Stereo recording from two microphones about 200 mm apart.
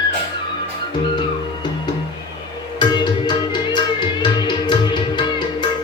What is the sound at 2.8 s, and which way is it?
Music, 20° left (ahead or behind).